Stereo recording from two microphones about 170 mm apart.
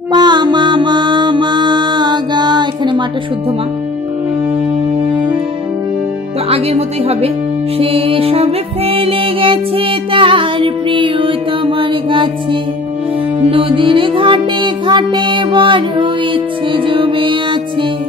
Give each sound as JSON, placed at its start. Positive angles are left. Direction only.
{"t": 0.1, "sound": "music", "side_deg": -25}
{"t": 6.5, "sound": "music", "side_deg": -35}
{"t": 13.4, "sound": "music", "side_deg": -35}